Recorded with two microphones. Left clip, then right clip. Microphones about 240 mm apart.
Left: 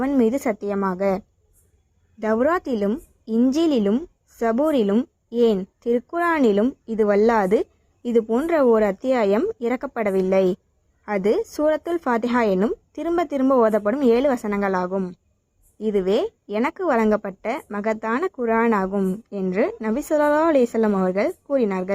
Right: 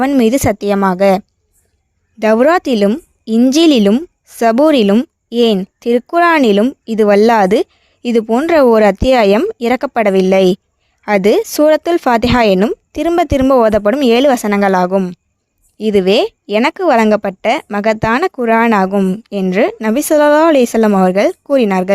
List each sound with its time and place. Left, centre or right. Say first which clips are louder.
0.0 s speech: right 9 dB; right
2.3 s speech: right 10 dB; right
3.5 s a woman's voice: right 13 dB; right
4.6 s speech: right 9 dB; right
6.4 s speech: right 8 dB; right
18.9 s speech: right 9 dB; right
19.4 s speech: right 9 dB; right
21.5 s speech: right 10 dB; right